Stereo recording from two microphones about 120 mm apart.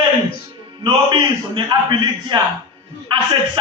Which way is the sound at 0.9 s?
40° right (ahead or behind).